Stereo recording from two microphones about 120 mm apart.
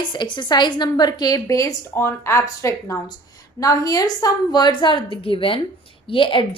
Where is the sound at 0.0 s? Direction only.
40° left (ahead or behind).